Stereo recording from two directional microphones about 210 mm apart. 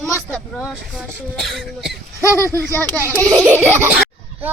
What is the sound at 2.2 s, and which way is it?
Speech, 15° left (ahead or behind).